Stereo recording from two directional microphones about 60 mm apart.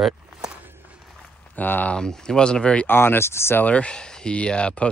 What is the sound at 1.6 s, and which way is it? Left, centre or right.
Speech, left.